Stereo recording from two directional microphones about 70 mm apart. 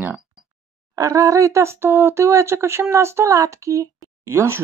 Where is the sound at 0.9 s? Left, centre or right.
Right.